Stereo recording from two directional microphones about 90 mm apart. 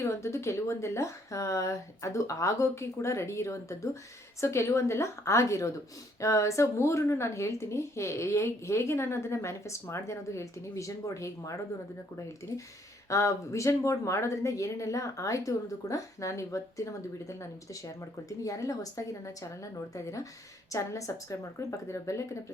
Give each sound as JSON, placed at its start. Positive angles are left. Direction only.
{"t": 0.0, "sound": "speech", "side_deg": 30}
{"t": 13.1, "sound": "speech", "side_deg": 35}
{"t": 17.8, "sound": "speech", "side_deg": 40}
{"t": 20.7, "sound": "speech", "side_deg": 35}